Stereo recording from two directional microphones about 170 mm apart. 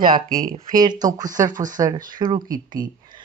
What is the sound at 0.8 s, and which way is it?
Speech, 20° right (ahead or behind).